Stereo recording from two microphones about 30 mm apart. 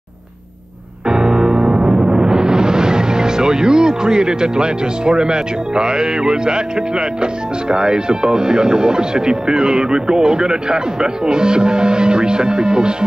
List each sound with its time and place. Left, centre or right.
1.0 s music: right
7.7 s speech: right